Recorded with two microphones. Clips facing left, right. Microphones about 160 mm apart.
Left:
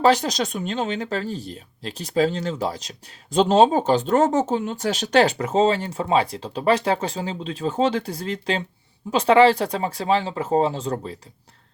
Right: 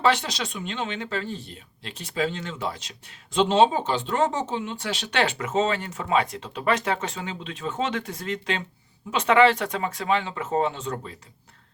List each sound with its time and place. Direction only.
0.0 s speech: 40° left (ahead or behind)